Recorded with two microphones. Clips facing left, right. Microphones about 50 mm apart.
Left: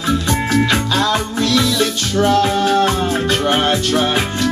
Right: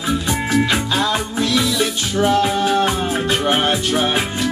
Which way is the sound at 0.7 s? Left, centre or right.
Centre.